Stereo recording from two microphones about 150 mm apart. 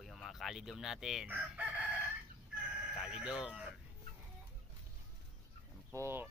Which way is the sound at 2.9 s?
5° right (ahead or behind).